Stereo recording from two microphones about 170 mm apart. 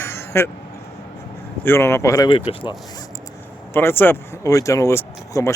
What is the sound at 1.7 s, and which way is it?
Speech, 15° left (ahead or behind).